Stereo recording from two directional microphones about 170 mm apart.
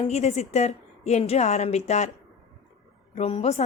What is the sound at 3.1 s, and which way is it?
Speech, 40° left (ahead or behind).